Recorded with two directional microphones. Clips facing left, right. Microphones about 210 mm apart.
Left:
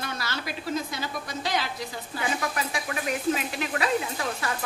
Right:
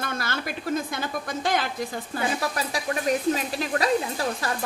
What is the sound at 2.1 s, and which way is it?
Speech, 35° right (ahead or behind).